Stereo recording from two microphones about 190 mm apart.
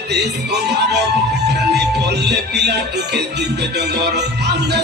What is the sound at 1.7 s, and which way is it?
Speech, 60° right (ahead or behind).